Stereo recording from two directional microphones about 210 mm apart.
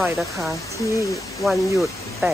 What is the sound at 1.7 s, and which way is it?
Speech, centre (ahead or behind).